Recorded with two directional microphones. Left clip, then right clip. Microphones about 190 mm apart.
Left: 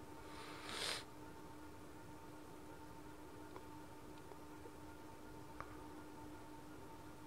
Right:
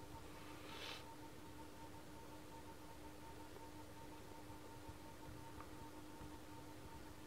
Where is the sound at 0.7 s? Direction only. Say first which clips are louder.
Left 8 dB; 45° left (ahead or behind).